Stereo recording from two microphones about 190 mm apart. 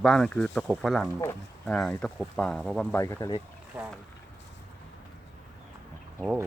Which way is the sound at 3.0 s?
15° left (ahead or behind).